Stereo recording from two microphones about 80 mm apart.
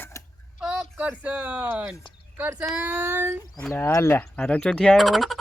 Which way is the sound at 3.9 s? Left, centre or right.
Left.